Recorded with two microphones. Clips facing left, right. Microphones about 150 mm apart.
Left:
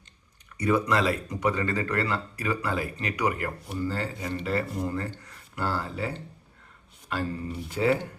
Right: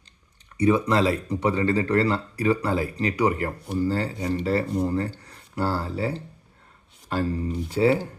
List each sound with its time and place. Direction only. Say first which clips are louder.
0.5 s speech: right 4 dB; 25° right (ahead or behind)